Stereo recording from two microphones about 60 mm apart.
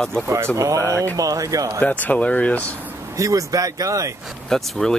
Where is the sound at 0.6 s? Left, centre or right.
Right.